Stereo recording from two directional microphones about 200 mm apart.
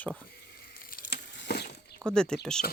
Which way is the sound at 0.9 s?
55° left (ahead or behind).